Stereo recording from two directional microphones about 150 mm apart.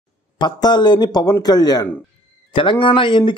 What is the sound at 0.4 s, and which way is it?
Speech, 30° left (ahead or behind).